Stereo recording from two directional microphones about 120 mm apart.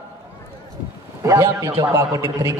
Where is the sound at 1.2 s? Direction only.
25° right (ahead or behind).